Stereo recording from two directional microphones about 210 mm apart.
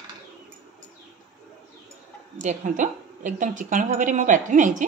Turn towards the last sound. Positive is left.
turn(degrees=-35)  # may be behind; listen again after turning